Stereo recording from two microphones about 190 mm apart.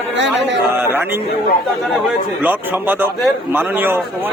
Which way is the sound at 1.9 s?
10° right (ahead or behind).